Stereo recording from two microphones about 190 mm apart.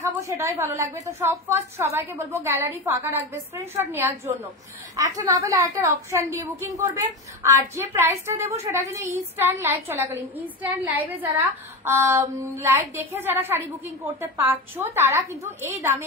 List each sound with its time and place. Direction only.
0.0 s a woman's voice: 15° right (ahead or behind)